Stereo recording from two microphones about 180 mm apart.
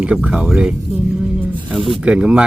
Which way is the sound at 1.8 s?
30° right (ahead or behind).